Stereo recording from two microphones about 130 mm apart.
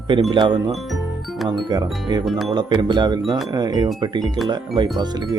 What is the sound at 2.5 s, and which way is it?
Speech, 35° right (ahead or behind).